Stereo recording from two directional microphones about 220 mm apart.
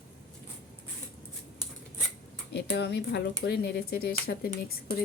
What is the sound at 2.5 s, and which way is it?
Speech, 50° left (ahead or behind).